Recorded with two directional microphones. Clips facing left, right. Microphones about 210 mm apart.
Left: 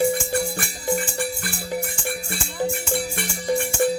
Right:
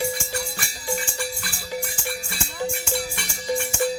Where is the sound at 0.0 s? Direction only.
55° left (ahead or behind).